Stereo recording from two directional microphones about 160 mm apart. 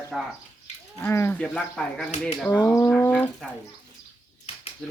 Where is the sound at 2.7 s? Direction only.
15° left (ahead or behind).